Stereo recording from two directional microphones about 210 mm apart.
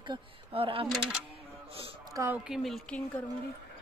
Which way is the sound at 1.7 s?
25° right (ahead or behind).